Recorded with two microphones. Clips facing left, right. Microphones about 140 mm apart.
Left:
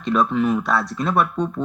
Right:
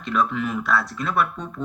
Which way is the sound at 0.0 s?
20° left (ahead or behind).